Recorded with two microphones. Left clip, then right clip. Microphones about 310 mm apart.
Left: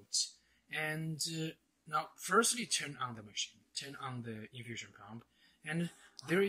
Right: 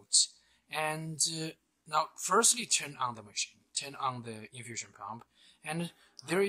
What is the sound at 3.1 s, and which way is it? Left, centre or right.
Speech, right.